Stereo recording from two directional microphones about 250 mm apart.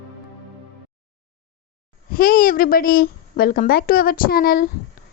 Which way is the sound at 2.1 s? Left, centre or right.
Left.